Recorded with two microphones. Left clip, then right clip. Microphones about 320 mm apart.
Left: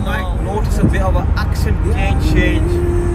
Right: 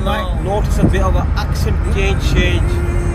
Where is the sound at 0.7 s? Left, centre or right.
Centre.